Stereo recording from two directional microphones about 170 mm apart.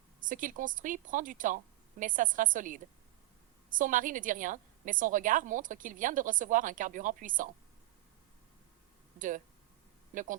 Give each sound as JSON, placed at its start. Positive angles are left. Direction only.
{"t": 0.2, "sound": "a woman's voice", "side_deg": -50}
{"t": 9.1, "sound": "speech", "side_deg": -50}